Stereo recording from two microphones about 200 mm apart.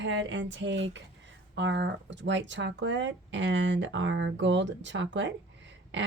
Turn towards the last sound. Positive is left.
turn(degrees=-65)  # may be behind; listen again after turning